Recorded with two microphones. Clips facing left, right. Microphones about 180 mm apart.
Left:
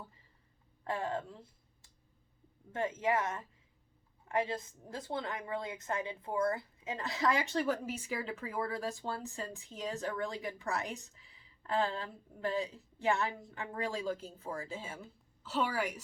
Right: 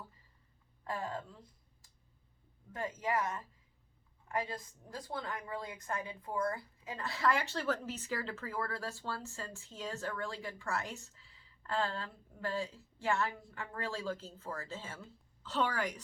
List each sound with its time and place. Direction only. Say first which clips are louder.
0.9 s a woman's voice: left 4 dB; 25° left (ahead or behind); by 16.0 s 10° left (ahead or behind)